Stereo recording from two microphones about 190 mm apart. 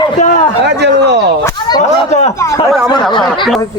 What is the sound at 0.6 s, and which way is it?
Speech, 65° right (ahead or behind).